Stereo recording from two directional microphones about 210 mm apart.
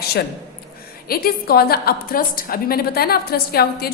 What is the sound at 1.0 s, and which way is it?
A woman's voice, 45° left (ahead or behind).